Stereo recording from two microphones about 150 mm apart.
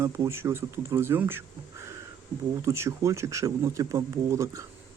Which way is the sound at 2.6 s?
20° right (ahead or behind).